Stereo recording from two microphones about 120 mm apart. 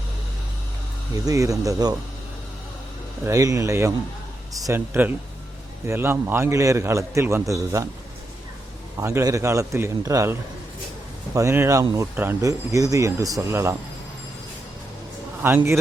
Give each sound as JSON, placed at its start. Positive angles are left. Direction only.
{"t": 1.1, "sound": "a man's voice", "side_deg": -30}
{"t": 3.2, "sound": "a man's voice", "side_deg": -25}
{"t": 9.0, "sound": "a man's voice", "side_deg": -25}
{"t": 11.3, "sound": "a man's voice", "side_deg": -25}
{"t": 12.5, "sound": "a man's voice", "side_deg": -30}
{"t": 15.4, "sound": "a man's voice", "side_deg": -20}